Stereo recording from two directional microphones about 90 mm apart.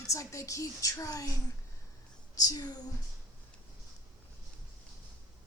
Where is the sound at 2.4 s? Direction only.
45° left (ahead or behind).